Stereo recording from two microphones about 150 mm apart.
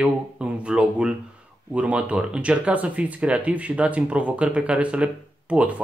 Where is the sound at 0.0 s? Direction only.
10° right (ahead or behind).